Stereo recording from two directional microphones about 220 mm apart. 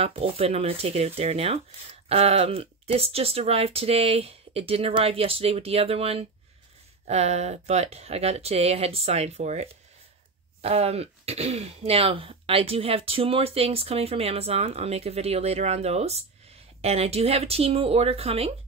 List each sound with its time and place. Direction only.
0.0 s speech: 25° right (ahead or behind)